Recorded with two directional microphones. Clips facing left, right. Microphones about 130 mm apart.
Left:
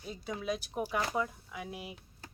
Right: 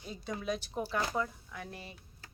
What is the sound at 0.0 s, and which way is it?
A woman's voice, 5° left (ahead or behind).